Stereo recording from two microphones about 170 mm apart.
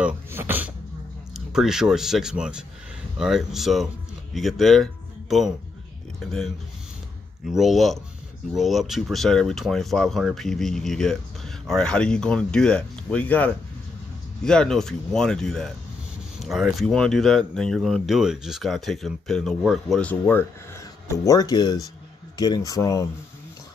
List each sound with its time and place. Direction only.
0.0 s speech: 10° right (ahead or behind)
7.4 s speech: centre (ahead or behind); by 23.0 s 20° left (ahead or behind)